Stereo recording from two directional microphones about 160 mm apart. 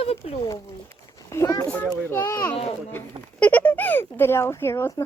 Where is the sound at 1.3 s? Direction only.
20° left (ahead or behind).